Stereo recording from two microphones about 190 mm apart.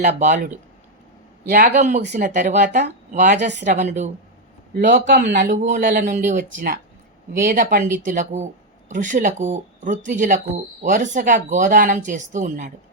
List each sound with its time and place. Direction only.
0.0 s speech: 40° right (ahead or behind)